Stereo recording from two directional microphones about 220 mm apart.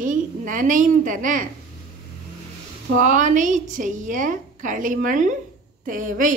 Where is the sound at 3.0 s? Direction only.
35° right (ahead or behind).